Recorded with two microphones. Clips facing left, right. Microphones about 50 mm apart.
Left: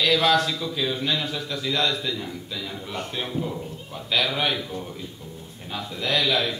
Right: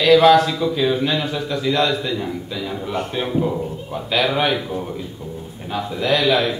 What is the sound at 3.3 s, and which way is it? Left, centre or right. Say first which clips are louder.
Speech: right 8 dB; right.